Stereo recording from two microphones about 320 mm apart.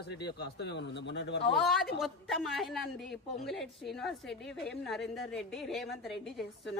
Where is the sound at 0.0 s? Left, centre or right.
Left.